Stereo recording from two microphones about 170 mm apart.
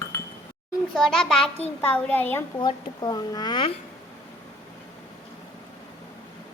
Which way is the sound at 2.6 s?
25° left (ahead or behind).